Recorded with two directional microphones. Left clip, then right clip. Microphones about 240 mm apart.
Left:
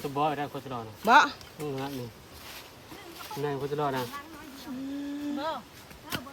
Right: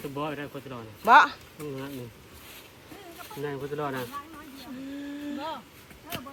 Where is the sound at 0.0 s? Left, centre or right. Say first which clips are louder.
Left 5 dB; left.